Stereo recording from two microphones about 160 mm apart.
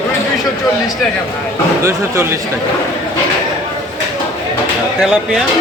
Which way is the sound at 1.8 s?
20° right (ahead or behind).